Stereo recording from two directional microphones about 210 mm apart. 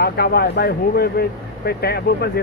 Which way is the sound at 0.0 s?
50° left (ahead or behind).